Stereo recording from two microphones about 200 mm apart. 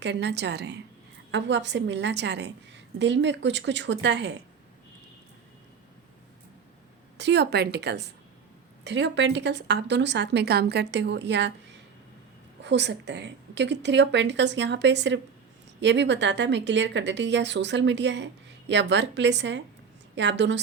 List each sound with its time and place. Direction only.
0.0 s a woman's voice: 60° right (ahead or behind)
7.2 s a woman's voice: 60° right (ahead or behind)
12.6 s a woman's voice: 60° right (ahead or behind)